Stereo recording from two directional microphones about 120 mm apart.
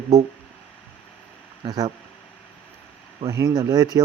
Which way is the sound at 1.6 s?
35° right (ahead or behind).